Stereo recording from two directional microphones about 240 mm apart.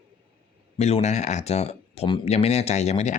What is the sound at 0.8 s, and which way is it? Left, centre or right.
Speech, left.